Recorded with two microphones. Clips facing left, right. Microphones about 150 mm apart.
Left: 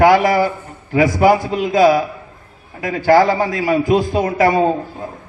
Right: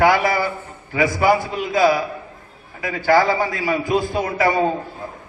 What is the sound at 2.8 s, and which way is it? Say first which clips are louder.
A man's voice: left 4 dB; 45° left (ahead or behind).